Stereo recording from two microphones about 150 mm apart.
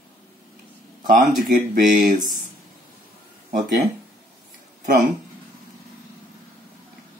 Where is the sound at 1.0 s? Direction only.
65° right (ahead or behind).